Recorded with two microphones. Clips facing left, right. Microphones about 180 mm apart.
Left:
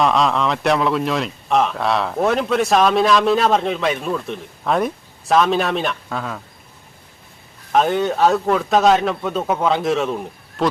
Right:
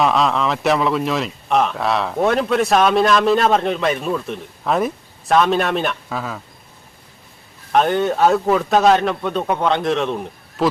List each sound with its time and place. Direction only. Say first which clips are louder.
0.0 s a man's voice: even; centre (ahead or behind)
7.7 s a man's voice: right 1 dB; centre (ahead or behind)